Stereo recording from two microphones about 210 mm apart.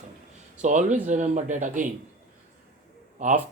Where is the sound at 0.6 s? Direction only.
35° right (ahead or behind).